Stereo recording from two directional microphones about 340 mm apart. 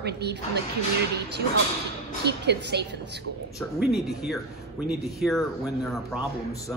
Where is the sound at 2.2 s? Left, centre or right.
Right.